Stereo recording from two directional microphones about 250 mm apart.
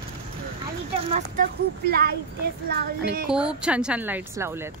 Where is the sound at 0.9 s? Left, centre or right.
Right.